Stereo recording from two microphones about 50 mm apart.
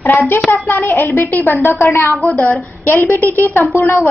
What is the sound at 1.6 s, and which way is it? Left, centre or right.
Speech, left.